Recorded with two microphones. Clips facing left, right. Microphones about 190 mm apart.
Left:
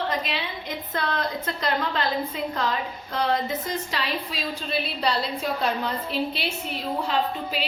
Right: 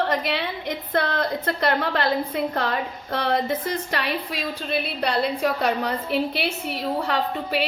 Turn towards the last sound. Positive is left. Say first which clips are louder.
# right 2 dB
turn(degrees=-70)  # may be behind; listen again after turning